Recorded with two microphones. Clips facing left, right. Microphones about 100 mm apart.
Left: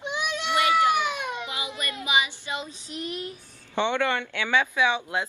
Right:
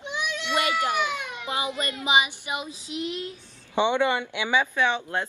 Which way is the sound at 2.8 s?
45° left (ahead or behind).